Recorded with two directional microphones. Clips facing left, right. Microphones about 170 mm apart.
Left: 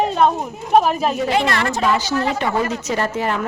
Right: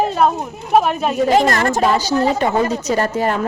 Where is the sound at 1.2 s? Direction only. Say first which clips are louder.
Right 4 dB; 45° right (ahead or behind).